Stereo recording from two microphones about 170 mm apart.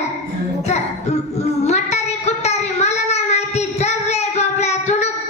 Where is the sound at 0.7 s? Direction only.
40° left (ahead or behind).